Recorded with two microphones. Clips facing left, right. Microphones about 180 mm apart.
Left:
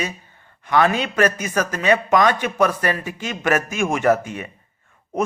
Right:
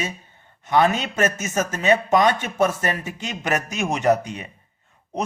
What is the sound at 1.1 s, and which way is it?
Speech, 25° right (ahead or behind).